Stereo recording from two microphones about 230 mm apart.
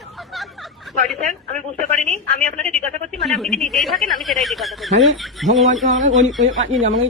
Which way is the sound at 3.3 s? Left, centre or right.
Centre.